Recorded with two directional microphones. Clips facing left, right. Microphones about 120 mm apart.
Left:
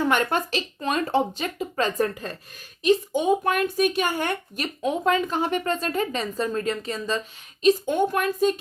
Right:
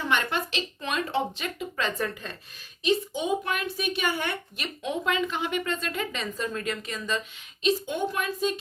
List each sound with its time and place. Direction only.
0.1 s a woman's voice: 45° left (ahead or behind)
7.6 s a woman's voice: 45° left (ahead or behind)